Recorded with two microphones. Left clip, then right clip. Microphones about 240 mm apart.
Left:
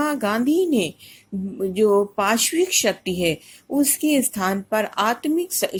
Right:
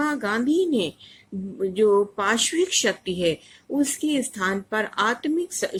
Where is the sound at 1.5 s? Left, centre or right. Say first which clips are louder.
Left 1 dB; centre.